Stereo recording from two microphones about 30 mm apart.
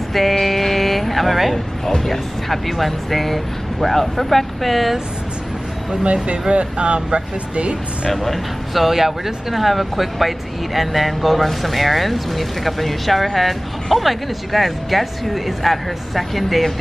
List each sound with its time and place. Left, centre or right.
0.1 s vehicle: centre
2.0 s speech: centre
6.5 s speech: right
8.1 s speech: centre
8.8 s speech: centre